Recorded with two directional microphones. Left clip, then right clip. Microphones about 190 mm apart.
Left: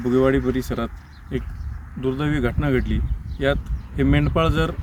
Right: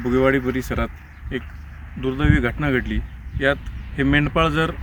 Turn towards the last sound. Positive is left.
turn(degrees=5)  # may be behind; listen again after turning